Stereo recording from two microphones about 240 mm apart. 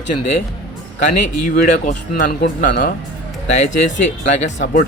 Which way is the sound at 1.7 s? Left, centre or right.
Left.